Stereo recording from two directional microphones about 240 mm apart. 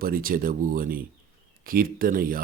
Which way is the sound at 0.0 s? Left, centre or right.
Right.